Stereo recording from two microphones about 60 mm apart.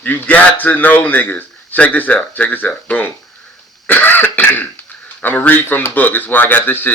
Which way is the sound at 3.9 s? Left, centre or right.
Left.